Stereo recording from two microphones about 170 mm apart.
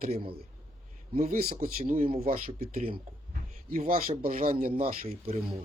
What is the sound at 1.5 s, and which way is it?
Speech, 55° right (ahead or behind).